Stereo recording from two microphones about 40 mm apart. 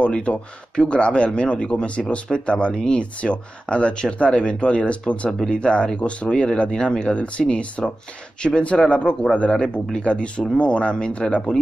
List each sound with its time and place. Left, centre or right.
0.0 s speech: left
3.0 s speech: left